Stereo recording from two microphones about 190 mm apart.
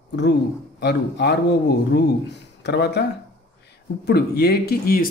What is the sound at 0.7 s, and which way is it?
A man's voice, 60° left (ahead or behind).